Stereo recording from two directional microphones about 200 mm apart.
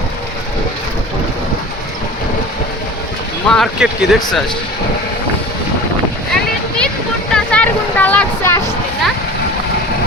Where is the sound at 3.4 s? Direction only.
Centre (ahead or behind).